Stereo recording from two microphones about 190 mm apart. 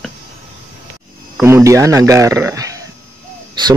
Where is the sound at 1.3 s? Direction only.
15° right (ahead or behind).